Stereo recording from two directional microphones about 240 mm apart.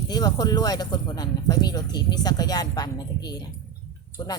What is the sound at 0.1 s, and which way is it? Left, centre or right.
Speech, centre.